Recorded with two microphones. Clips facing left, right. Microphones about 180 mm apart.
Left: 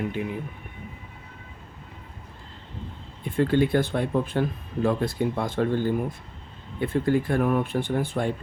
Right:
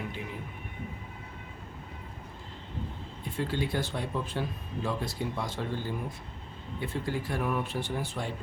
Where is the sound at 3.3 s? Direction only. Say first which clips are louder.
Left 10 dB; 55° left (ahead or behind).